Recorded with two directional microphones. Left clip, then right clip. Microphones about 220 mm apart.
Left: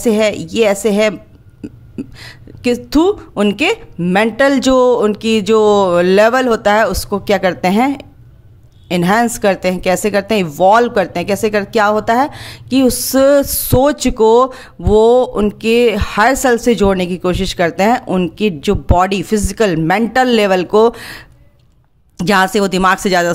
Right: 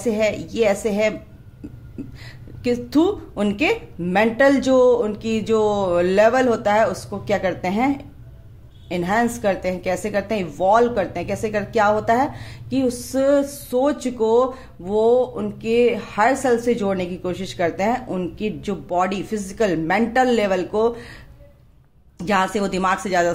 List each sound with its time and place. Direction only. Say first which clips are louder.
0.0 s a woman's voice: left 7 dB; 35° left (ahead or behind)